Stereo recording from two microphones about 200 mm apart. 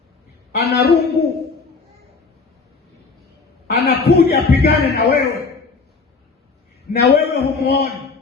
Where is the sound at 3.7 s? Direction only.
50° left (ahead or behind).